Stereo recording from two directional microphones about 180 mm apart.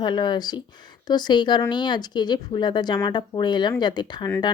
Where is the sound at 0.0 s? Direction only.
25° left (ahead or behind).